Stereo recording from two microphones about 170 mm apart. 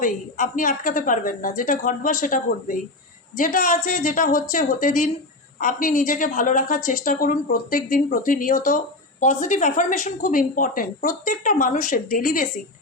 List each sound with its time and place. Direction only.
0.0 s a woman's voice: 50° left (ahead or behind)